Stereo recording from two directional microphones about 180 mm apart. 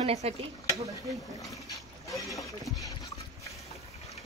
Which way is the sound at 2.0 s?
20° left (ahead or behind).